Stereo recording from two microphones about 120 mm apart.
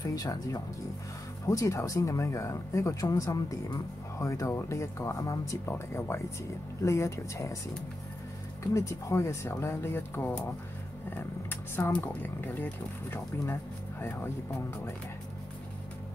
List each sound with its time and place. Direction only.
0.0 s speech: 30° left (ahead or behind)
8.7 s speech: 25° left (ahead or behind)
11.7 s speech: 15° left (ahead or behind)